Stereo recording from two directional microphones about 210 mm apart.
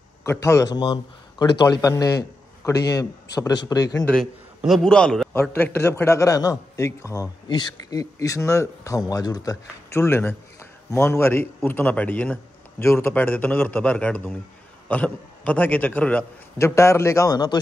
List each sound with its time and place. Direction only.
0.2 s a man's voice: 15° left (ahead or behind)
4.6 s a man's voice: centre (ahead or behind); by 17.6 s 20° left (ahead or behind)